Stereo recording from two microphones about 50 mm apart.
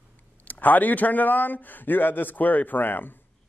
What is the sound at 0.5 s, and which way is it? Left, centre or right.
A man's voice, left.